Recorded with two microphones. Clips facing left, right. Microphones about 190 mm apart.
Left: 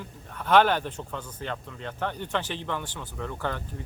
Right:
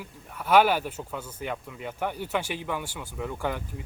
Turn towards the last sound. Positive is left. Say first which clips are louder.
# right 1 dB
turn(degrees=-10)  # may be behind; listen again after turning